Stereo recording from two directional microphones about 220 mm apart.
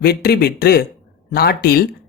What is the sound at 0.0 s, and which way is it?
Speech, 45° left (ahead or behind).